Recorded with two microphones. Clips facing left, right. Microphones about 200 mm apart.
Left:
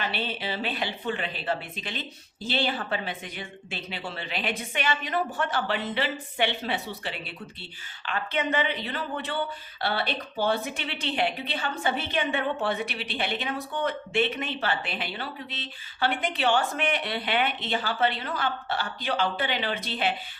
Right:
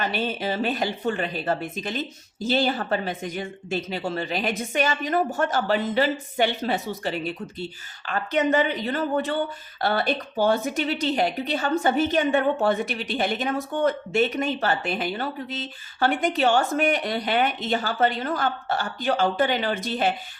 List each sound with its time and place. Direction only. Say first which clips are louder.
0.0 s a woman's voice: right 5 dB; 45° right (ahead or behind)